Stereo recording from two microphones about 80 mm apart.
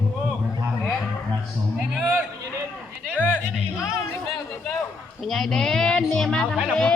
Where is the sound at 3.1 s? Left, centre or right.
Left.